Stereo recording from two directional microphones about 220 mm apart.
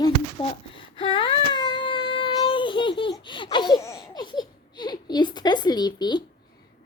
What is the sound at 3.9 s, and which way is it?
Baby laughter, 20° left (ahead or behind).